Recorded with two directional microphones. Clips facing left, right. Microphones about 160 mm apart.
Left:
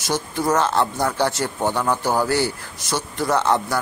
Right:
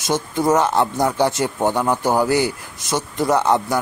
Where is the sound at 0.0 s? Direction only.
20° right (ahead or behind).